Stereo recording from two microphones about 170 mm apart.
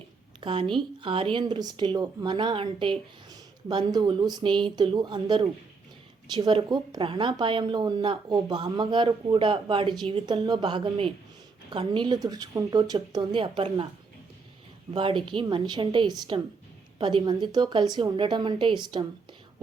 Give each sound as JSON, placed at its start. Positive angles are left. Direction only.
{"t": 0.3, "sound": "speech", "side_deg": -30}
{"t": 14.9, "sound": "speech", "side_deg": -30}